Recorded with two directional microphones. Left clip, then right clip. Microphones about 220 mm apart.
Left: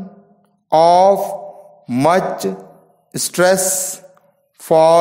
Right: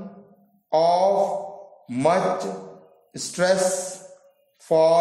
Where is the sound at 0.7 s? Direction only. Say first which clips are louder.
Left 8 dB; 35° left (ahead or behind).